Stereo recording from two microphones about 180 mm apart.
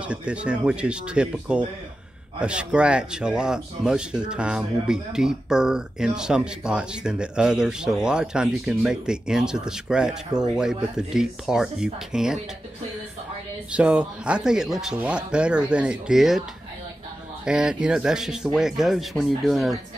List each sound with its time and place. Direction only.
0.0 s speech: 5° right (ahead or behind)
13.7 s speech: 5° right (ahead or behind)
17.5 s speech: 5° right (ahead or behind)